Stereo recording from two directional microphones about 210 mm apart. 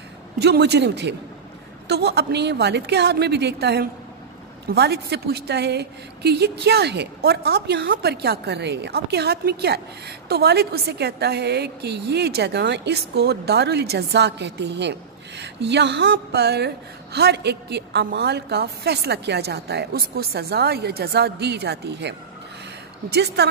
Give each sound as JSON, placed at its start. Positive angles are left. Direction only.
{"t": 0.4, "sound": "a woman's voice", "side_deg": -55}